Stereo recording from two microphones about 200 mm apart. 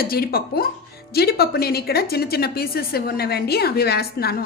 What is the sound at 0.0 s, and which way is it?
A woman's voice, 50° left (ahead or behind).